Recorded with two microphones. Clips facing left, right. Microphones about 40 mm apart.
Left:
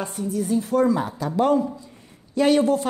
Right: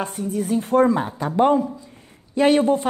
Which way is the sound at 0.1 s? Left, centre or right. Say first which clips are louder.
Right 1 dB; right.